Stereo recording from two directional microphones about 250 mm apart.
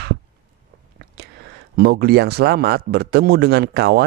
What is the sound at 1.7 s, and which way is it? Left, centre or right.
Speech, right.